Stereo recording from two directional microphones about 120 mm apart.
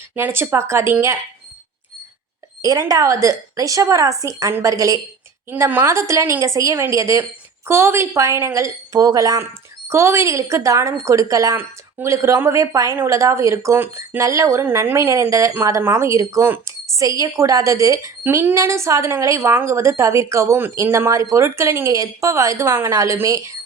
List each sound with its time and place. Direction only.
0.2 s a woman's voice: 20° right (ahead or behind)
2.6 s a woman's voice: 30° right (ahead or behind)
14.3 s a woman's voice: 25° right (ahead or behind)